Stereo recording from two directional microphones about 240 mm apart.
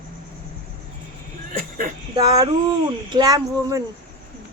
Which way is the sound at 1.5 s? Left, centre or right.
Right.